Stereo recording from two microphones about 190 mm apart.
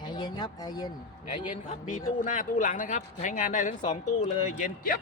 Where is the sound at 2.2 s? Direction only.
45° left (ahead or behind).